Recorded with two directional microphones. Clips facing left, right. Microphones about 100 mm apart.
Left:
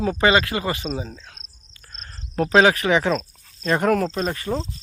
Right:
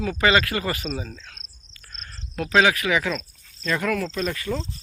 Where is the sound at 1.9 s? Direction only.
35° left (ahead or behind).